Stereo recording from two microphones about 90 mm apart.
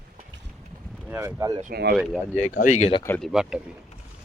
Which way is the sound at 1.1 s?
30° right (ahead or behind).